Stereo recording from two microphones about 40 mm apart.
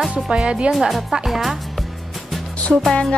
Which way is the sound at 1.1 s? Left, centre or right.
Centre.